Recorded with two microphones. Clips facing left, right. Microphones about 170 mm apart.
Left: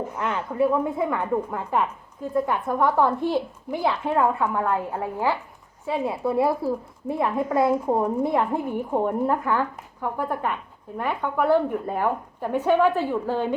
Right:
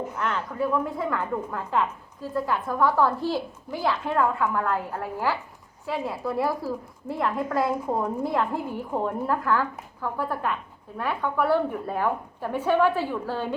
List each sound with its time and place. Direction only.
0.2 s a woman's voice: 15° left (ahead or behind)